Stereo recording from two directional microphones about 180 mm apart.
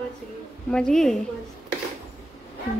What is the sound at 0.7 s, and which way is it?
Speech, 5° left (ahead or behind).